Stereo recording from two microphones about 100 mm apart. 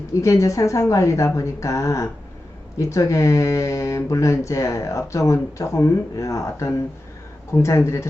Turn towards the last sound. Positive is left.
turn(degrees=30)  # may be behind; listen again after turning